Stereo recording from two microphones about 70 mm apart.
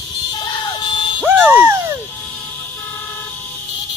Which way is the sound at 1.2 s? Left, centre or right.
Right.